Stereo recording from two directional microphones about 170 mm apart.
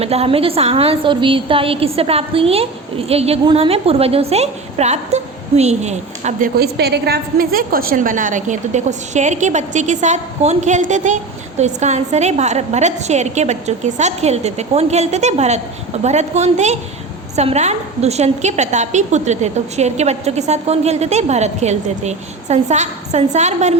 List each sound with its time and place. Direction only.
0.0 s a woman's voice: 35° right (ahead or behind)
6.6 s a woman's voice: 75° right (ahead or behind); by 23.7 s 40° right (ahead or behind)